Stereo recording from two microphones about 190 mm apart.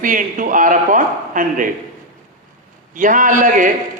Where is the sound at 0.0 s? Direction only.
45° right (ahead or behind).